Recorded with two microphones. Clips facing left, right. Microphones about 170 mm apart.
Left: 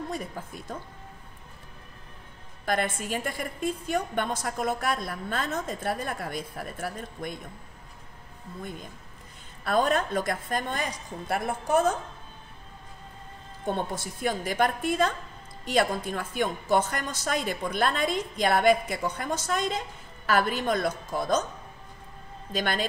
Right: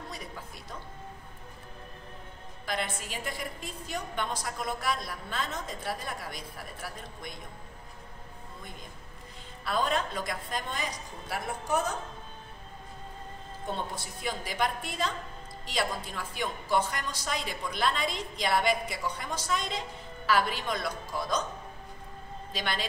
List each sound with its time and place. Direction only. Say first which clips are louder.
2.6 s speech: left 6 dB; 50° left (ahead or behind)
9.7 s speech: left 5 dB; 50° left (ahead or behind)
13.7 s speech: left 6 dB; 50° left (ahead or behind)
22.5 s speech: left 6 dB; 50° left (ahead or behind)